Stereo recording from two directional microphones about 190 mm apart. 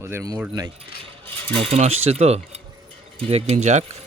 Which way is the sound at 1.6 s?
35° right (ahead or behind).